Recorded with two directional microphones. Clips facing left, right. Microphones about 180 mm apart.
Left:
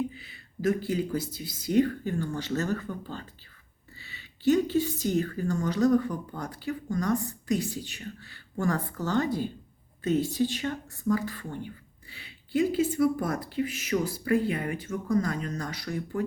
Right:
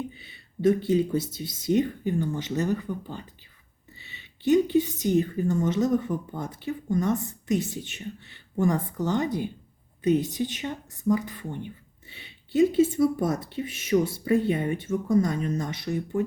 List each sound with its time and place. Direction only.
0.2 s speech: 25° right (ahead or behind)